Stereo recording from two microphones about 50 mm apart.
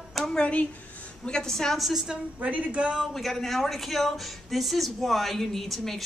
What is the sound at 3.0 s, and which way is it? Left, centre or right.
A woman's voice, centre.